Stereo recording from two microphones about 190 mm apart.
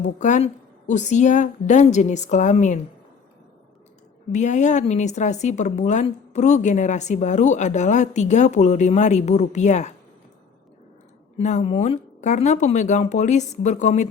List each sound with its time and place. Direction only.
0.2 s speech: 40° left (ahead or behind)
4.3 s speech: 40° left (ahead or behind)
11.3 s speech: 35° left (ahead or behind)